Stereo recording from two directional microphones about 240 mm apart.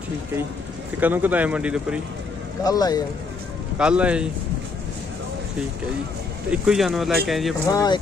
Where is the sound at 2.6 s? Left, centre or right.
Centre.